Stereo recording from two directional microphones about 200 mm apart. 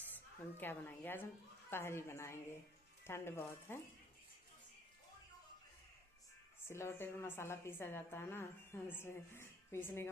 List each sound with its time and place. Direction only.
0.1 s a woman's voice: 10° left (ahead or behind)
6.7 s a woman's voice: 10° left (ahead or behind)